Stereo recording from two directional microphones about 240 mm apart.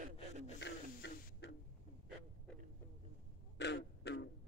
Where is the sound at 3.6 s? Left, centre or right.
Left.